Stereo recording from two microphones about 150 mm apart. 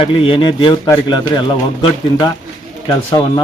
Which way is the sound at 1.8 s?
30° left (ahead or behind).